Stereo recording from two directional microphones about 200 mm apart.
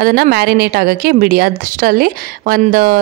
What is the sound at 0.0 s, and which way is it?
A woman's voice, 50° right (ahead or behind).